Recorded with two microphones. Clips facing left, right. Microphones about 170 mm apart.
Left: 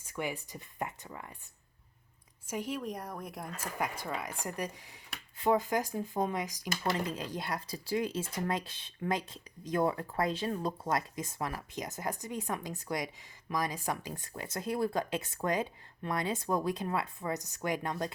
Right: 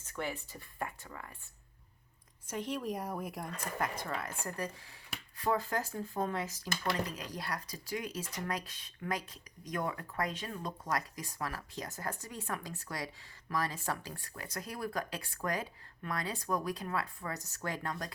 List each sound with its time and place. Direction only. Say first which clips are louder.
0.0 s speech: left 2 dB; 15° left (ahead or behind)
2.5 s speech: even; 5° left (ahead or behind)
3.8 s speech: left 1 dB; 10° left (ahead or behind)
7.1 s speech: left 4 dB; 25° left (ahead or behind)